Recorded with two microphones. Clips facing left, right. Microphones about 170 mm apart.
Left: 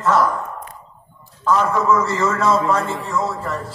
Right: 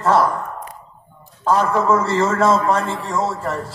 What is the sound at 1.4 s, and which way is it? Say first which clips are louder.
A man's voice: right 1 dB; 30° right (ahead or behind).